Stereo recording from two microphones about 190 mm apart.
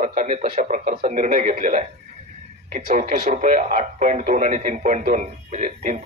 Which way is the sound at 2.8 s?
45° right (ahead or behind).